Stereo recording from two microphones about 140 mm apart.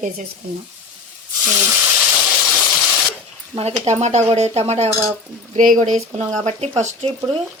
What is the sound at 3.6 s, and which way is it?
Speech, 50° right (ahead or behind).